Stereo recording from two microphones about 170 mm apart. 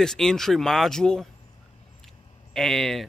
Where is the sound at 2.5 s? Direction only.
Centre (ahead or behind).